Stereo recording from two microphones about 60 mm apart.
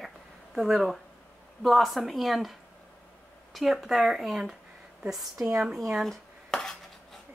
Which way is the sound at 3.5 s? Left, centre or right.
Centre.